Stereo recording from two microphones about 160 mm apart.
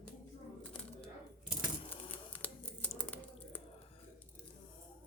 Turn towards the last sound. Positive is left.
turn(degrees=10)  # may be behind; listen again after turning